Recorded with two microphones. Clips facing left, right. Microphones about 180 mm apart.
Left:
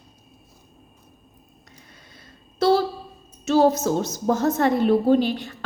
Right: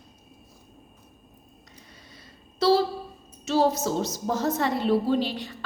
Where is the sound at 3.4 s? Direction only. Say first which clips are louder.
Left 5 dB; 50° left (ahead or behind).